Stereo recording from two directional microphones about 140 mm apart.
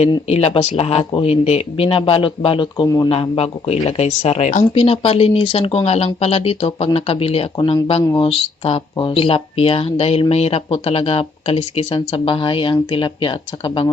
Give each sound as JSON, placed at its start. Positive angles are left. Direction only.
{"t": 0.3, "sound": "speech", "side_deg": 45}
{"t": 3.1, "sound": "speech", "side_deg": 45}